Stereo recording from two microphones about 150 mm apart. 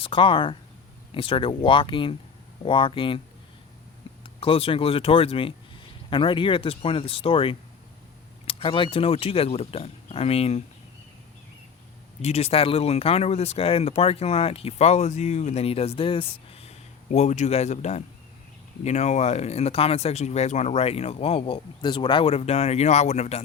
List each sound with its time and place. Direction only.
0.0 s speech: 35° left (ahead or behind)
4.2 s speech: 35° left (ahead or behind)
12.2 s speech: 45° left (ahead or behind)